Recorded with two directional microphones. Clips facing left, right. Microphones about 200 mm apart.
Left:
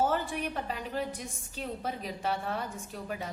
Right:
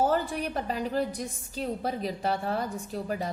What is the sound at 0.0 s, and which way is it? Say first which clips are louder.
A woman's voice: right 3 dB; 40° right (ahead or behind).